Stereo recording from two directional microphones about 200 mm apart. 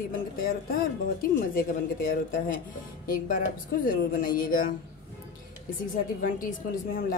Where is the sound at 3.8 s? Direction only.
45° left (ahead or behind).